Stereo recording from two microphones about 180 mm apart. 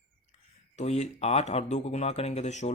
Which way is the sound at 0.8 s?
40° left (ahead or behind).